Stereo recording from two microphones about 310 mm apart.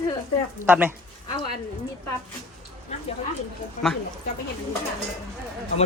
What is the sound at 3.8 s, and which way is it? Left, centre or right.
Speech, centre.